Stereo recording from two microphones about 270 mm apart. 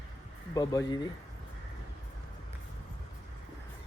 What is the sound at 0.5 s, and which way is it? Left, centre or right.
Speech, centre.